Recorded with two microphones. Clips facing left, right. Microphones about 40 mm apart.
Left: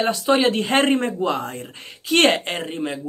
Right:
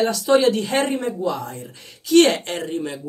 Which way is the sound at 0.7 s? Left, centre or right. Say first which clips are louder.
Left 3 dB; left.